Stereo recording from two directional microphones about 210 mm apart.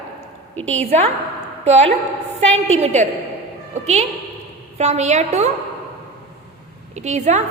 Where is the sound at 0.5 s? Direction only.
5° left (ahead or behind).